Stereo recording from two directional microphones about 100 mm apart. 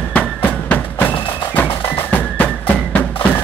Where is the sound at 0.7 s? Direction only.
20° left (ahead or behind).